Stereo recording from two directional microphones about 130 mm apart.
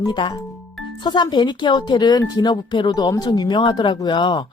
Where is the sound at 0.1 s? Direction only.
40° left (ahead or behind).